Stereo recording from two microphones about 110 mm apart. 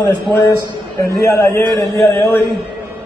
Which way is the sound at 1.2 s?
25° left (ahead or behind).